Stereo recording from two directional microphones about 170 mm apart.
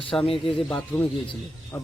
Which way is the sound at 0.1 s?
20° left (ahead or behind).